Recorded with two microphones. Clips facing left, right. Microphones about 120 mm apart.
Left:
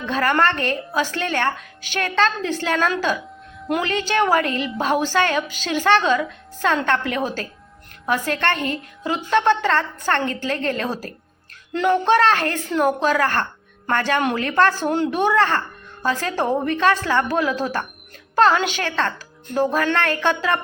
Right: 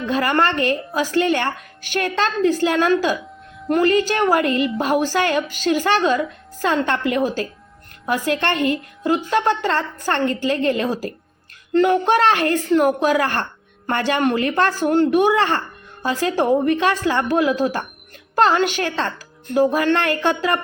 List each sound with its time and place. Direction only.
0.0 s a woman's voice: 10° right (ahead or behind)
12.0 s a woman's voice: 15° right (ahead or behind)
14.2 s a woman's voice: centre (ahead or behind)
14.4 s a woman's voice: 10° right (ahead or behind)
18.5 s a woman's voice: centre (ahead or behind)